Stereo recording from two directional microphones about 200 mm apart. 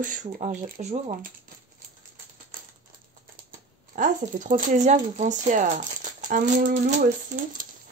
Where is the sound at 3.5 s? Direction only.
40° right (ahead or behind).